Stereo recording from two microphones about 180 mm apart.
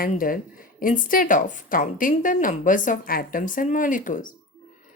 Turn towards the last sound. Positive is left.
turn(degrees=45)  # may be behind; listen again after turning